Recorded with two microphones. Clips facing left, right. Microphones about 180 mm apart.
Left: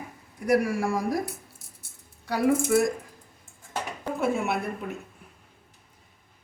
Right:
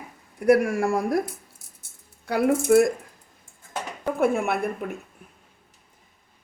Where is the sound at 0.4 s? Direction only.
55° right (ahead or behind).